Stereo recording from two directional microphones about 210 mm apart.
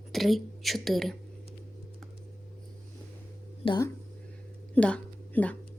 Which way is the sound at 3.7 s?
15° left (ahead or behind).